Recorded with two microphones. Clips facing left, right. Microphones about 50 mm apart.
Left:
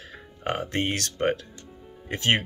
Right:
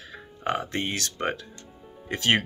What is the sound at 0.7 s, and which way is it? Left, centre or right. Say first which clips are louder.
Speech: left 2 dB; left.